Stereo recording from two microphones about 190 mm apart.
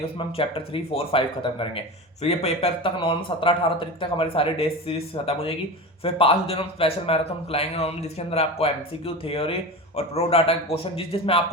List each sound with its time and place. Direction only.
0.0 s a man's voice: 30° left (ahead or behind)